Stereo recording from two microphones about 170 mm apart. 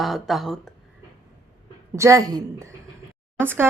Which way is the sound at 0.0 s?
Centre (ahead or behind).